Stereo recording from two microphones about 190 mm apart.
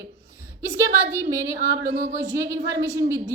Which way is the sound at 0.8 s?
15° right (ahead or behind).